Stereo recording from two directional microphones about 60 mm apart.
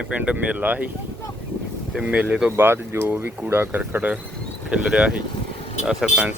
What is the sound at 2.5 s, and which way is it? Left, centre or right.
Speech, right.